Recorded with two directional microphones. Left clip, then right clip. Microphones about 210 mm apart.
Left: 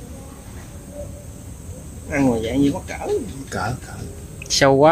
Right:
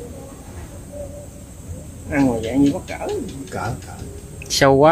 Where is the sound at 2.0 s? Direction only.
55° left (ahead or behind).